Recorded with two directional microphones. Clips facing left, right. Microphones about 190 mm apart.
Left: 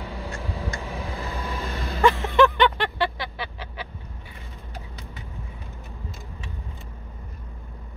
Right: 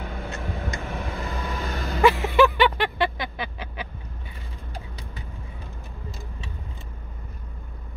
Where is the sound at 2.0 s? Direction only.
15° right (ahead or behind).